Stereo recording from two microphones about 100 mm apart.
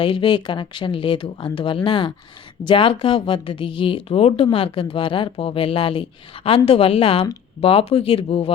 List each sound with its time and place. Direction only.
0.0 s speech: 55° left (ahead or behind); by 4.4 s 75° left (ahead or behind)
4.5 s a woman's voice: 65° left (ahead or behind)